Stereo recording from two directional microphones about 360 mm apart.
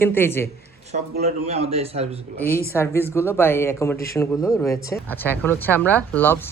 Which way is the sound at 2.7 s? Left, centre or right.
Centre.